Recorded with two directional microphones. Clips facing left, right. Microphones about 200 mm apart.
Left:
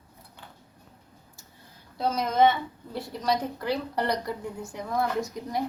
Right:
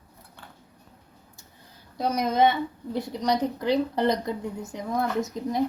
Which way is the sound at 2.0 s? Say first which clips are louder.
Right 1 dB; 15° right (ahead or behind).